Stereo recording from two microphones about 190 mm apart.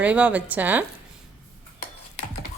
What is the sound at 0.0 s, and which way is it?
Speech, 5° right (ahead or behind).